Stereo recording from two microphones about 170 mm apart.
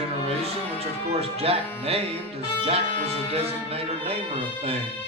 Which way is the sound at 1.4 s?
35° right (ahead or behind).